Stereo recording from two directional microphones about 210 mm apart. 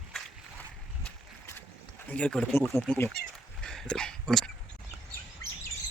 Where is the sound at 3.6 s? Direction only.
5° left (ahead or behind).